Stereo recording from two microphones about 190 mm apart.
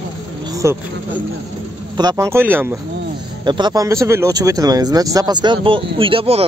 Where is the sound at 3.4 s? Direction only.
25° right (ahead or behind).